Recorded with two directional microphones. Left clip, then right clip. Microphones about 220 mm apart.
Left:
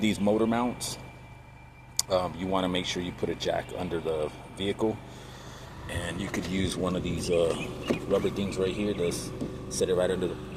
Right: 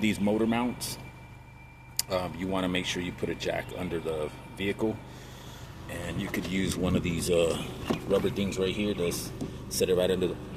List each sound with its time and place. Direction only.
0.0 s speech: 5° right (ahead or behind)
2.0 s speech: 5° right (ahead or behind)
5.9 s speech: centre (ahead or behind); by 10.2 s 20° right (ahead or behind)